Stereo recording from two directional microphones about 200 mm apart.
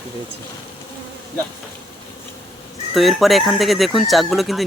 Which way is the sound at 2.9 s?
Centre (ahead or behind).